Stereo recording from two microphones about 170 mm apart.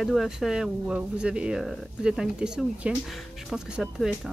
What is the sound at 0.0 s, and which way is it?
Speech, centre (ahead or behind).